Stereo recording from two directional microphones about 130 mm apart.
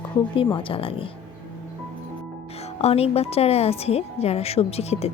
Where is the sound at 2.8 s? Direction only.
50° left (ahead or behind).